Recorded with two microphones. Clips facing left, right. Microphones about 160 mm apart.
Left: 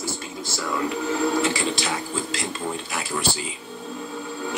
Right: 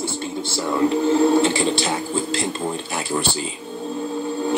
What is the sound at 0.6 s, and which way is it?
Speech, 30° right (ahead or behind).